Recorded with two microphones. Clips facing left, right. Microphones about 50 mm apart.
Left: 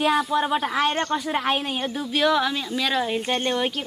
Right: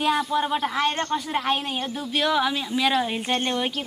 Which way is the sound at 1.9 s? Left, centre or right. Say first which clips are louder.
Left 2 dB; centre.